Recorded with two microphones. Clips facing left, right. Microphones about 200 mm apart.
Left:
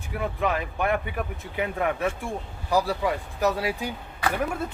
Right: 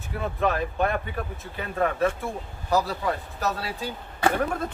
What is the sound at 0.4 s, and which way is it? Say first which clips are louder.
Speech: right 3 dB; 15° left (ahead or behind).